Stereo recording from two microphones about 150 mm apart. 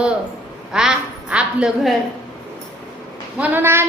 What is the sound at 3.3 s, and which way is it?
Speech, 10° right (ahead or behind).